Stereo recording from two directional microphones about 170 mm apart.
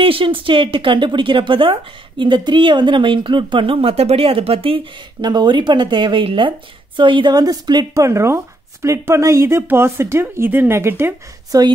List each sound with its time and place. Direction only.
0.0 s speech: 30° right (ahead or behind); by 11.6 s 15° right (ahead or behind)